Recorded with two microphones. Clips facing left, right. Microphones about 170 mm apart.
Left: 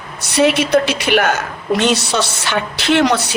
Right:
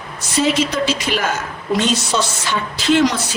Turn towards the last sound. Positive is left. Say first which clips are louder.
# left 1 dB
turn(degrees=70)  # may be behind; listen again after turning